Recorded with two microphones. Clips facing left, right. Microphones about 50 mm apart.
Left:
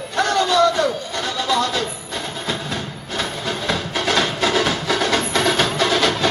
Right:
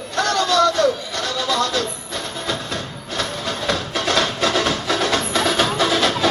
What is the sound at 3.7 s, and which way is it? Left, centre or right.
Music, centre.